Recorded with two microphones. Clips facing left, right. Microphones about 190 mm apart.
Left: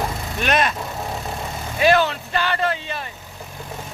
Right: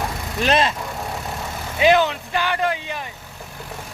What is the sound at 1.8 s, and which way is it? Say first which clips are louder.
Speech: right 1 dB; 20° right (ahead or behind).